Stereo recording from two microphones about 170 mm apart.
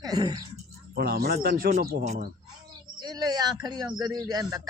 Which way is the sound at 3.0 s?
25° right (ahead or behind).